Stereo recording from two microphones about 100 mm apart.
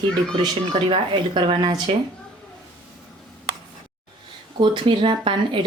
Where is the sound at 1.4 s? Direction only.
50° right (ahead or behind).